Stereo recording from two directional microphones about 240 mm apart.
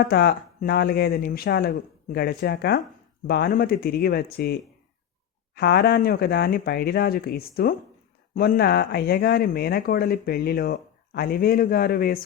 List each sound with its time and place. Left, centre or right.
0.1 s speech: left